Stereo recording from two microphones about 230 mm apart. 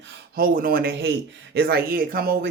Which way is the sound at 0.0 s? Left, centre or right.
Right.